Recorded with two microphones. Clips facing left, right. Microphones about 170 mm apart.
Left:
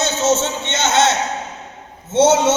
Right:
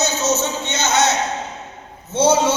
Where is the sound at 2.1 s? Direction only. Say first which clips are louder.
Left 3 dB; 20° left (ahead or behind).